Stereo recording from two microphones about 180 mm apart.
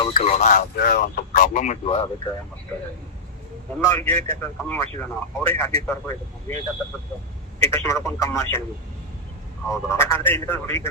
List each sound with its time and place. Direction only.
0.1 s a man's voice: 40° left (ahead or behind)
3.8 s a man's voice: 15° left (ahead or behind)
7.7 s a man's voice: 15° left (ahead or behind)
9.6 s a man's voice: 15° left (ahead or behind)